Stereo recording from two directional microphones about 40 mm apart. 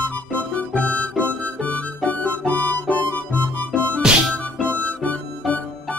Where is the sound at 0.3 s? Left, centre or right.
Left.